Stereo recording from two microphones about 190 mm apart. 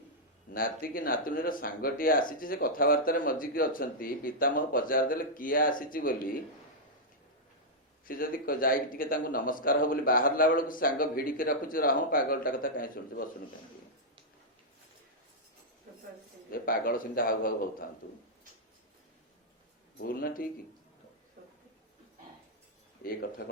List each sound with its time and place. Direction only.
0.5 s speech: 50° left (ahead or behind)
8.0 s speech: 50° left (ahead or behind)
16.5 s speech: 50° left (ahead or behind)
20.0 s speech: 50° left (ahead or behind)
23.4 s speech: 55° left (ahead or behind)